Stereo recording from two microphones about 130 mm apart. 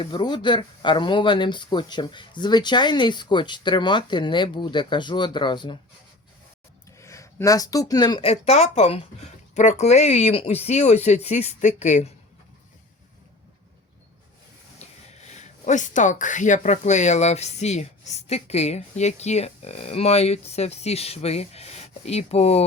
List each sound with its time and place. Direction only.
0.0 s speech: 35° left (ahead or behind)
6.9 s speech: 20° left (ahead or behind)
8.2 s speech: 50° left (ahead or behind)
14.8 s speech: 60° left (ahead or behind)